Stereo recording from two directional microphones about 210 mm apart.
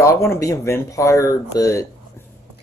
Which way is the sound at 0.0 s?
15° left (ahead or behind).